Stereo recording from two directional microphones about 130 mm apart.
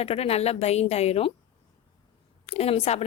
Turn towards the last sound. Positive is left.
turn(degrees=55)  # may be behind; listen again after turning